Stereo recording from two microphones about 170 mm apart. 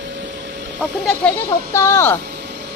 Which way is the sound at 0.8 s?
5° left (ahead or behind).